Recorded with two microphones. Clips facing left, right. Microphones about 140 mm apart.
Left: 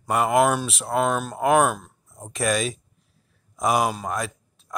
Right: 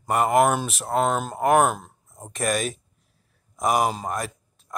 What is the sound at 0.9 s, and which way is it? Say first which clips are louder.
Speech: even; 20° right (ahead or behind).